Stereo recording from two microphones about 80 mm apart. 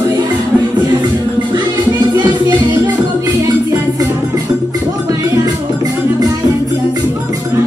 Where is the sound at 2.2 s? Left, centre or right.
Right.